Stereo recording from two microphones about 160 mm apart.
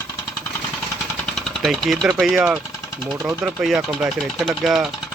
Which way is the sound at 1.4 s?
Centre (ahead or behind).